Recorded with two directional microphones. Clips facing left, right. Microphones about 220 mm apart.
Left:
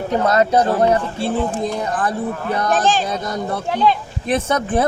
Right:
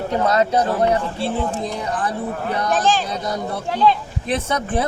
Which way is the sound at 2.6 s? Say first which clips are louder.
Left 1 dB; 50° left (ahead or behind).